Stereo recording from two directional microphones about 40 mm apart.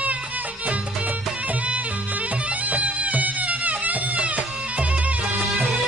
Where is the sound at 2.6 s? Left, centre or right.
Right.